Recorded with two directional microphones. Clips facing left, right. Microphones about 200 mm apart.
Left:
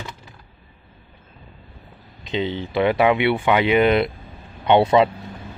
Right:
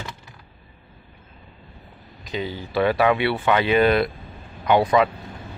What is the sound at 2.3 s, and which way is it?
Speech, 25° left (ahead or behind).